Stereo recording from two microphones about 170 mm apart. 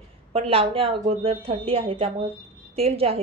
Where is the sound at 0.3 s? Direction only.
35° right (ahead or behind).